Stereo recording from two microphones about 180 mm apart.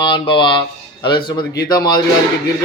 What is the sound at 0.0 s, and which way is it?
Speech, 25° left (ahead or behind).